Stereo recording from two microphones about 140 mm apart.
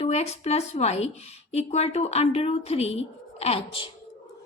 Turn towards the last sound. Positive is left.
turn(degrees=40)  # may be behind; listen again after turning